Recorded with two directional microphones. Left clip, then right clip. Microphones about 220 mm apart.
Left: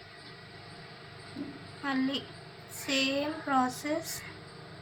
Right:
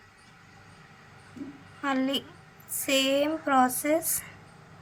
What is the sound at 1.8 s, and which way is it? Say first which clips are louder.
A woman's voice: right 4 dB; 45° right (ahead or behind).